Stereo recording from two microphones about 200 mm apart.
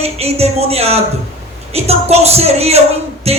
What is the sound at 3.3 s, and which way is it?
Music, 30° right (ahead or behind).